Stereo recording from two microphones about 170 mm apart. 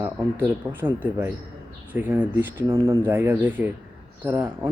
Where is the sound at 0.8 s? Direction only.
10° right (ahead or behind).